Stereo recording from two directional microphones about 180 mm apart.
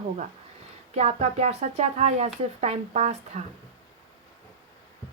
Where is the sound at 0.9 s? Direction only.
35° right (ahead or behind).